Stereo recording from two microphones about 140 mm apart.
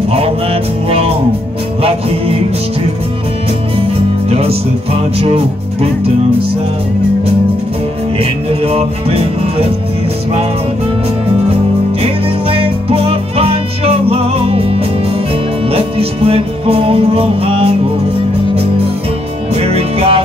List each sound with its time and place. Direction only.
0.8 s music: 45° right (ahead or behind)
4.3 s music: 45° right (ahead or behind)
5.2 s speech: 45° right (ahead or behind)
8.2 s music: 45° right (ahead or behind)
12.0 s music: 40° right (ahead or behind)
19.5 s music: 45° right (ahead or behind)